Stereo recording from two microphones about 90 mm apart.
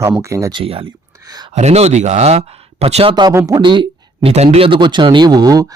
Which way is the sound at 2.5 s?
90° right.